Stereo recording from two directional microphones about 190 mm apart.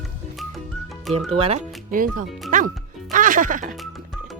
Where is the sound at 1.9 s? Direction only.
45° right (ahead or behind).